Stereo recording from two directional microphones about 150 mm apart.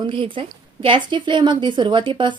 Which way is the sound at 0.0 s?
35° right (ahead or behind).